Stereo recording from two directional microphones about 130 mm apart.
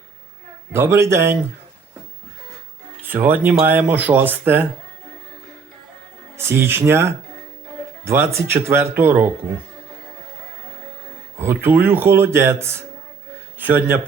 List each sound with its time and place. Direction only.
0.7 s speech: 20° right (ahead or behind)
3.0 s speech: 15° right (ahead or behind)
6.3 s speech: 20° right (ahead or behind)
11.3 s speech: 15° right (ahead or behind)